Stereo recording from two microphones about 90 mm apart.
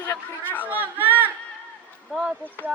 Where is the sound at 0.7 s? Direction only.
20° right (ahead or behind).